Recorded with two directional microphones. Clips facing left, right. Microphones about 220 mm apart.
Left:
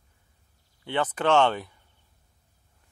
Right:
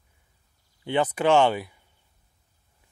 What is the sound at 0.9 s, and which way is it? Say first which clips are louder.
Speech: right 3 dB; 10° right (ahead or behind).